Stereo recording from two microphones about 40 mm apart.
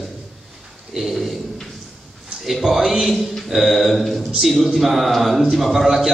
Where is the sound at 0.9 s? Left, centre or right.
Centre.